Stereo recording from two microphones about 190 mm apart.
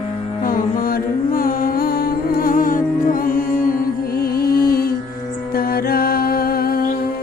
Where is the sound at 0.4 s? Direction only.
50° left (ahead or behind).